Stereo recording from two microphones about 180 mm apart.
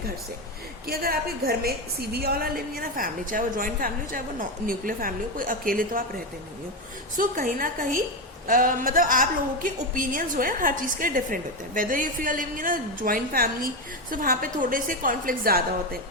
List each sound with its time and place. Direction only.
0.9 s a woman's voice: 55° right (ahead or behind)
7.2 s a woman's voice: 50° right (ahead or behind)